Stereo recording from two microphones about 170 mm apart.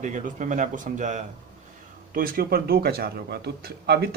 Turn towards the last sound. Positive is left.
turn(degrees=-70)  # may be behind; listen again after turning